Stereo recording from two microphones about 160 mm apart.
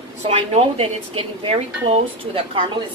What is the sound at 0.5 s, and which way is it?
Speech, 35° right (ahead or behind).